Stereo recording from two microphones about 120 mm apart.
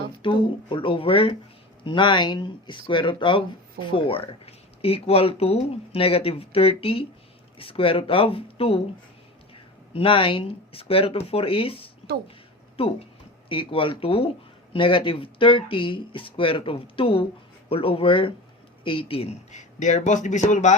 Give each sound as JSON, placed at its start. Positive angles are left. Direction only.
{"t": 0.2, "sound": "speech", "side_deg": 45}
{"t": 9.9, "sound": "speech", "side_deg": 50}